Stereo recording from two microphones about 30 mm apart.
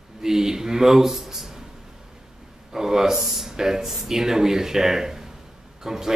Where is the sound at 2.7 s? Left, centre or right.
Centre.